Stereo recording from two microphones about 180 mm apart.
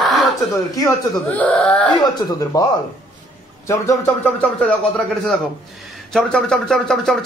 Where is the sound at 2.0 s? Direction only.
25° left (ahead or behind).